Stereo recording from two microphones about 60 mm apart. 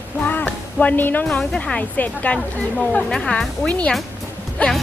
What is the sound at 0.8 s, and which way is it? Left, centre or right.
A woman's voice, left.